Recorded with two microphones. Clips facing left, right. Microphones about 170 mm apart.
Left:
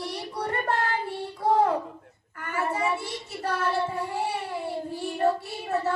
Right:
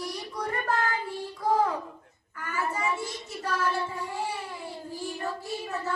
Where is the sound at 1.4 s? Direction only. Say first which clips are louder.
Left 2 dB; 30° left (ahead or behind).